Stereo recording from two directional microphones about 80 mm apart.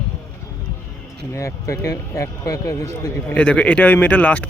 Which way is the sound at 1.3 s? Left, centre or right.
Left.